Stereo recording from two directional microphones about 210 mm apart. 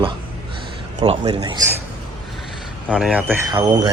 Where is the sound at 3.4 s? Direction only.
15° right (ahead or behind).